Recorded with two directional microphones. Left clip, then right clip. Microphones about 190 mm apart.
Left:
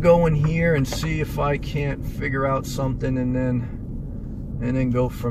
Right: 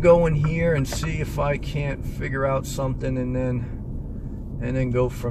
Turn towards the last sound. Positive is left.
turn(degrees=15)  # may be behind; listen again after turning